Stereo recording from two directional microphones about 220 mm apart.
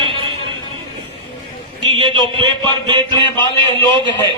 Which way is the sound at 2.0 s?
20° right (ahead or behind).